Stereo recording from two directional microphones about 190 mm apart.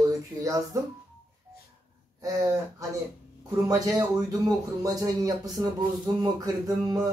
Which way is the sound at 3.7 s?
20° right (ahead or behind).